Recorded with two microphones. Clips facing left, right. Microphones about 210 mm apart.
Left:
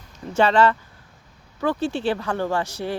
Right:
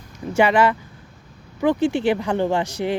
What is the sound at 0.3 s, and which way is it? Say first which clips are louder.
Speech: right 1 dB; 10° right (ahead or behind).